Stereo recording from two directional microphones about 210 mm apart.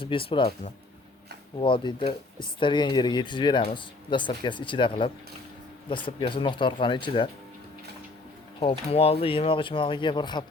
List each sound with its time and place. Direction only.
0.0 s speech: 25° left (ahead or behind)
8.5 s speech: 25° left (ahead or behind)